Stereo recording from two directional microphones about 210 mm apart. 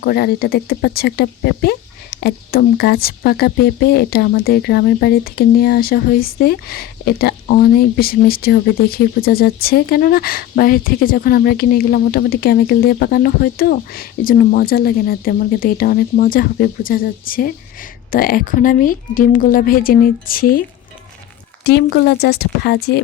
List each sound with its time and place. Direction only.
0.0 s speech: 50° left (ahead or behind)
21.6 s speech: 50° left (ahead or behind)